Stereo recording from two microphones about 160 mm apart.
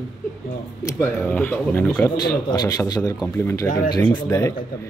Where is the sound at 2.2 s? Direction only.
25° left (ahead or behind).